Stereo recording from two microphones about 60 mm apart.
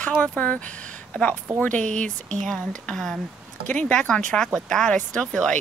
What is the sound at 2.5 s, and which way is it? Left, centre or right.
Speech, centre.